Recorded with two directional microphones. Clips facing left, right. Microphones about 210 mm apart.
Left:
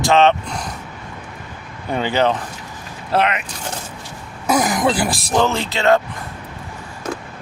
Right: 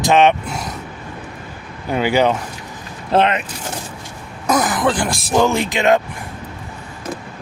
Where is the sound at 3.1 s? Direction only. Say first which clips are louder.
Right 3 dB; 25° right (ahead or behind).